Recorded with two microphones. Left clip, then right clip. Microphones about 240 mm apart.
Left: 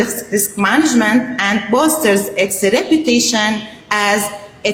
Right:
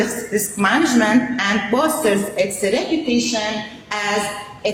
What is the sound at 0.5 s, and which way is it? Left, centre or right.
A woman's voice, centre.